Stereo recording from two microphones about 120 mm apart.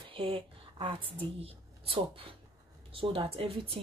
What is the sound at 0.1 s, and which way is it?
A woman's voice, 50° right (ahead or behind).